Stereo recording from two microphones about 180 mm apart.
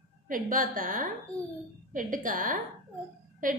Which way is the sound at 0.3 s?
50° right (ahead or behind).